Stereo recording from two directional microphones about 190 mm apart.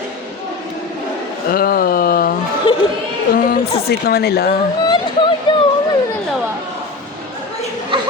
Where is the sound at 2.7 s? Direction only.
25° left (ahead or behind).